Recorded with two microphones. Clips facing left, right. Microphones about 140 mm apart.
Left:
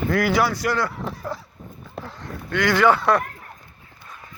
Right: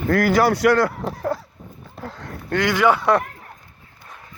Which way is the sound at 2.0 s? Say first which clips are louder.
Right 1 dB; 65° left (ahead or behind).